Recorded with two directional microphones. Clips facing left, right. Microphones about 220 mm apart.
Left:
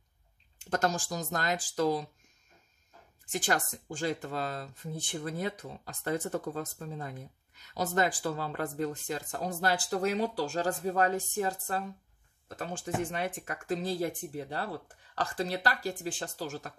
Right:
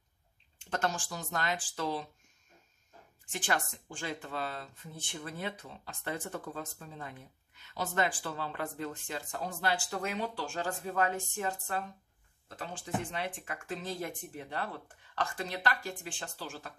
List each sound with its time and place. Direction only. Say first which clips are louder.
0.7 s speech: left 4 dB; 40° left (ahead or behind)
3.3 s speech: left 3 dB; 40° left (ahead or behind)